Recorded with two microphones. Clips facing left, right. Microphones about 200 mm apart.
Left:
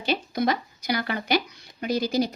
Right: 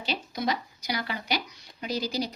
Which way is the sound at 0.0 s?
55° left (ahead or behind).